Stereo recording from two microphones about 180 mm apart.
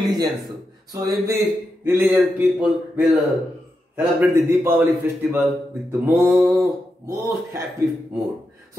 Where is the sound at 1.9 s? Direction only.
10° right (ahead or behind).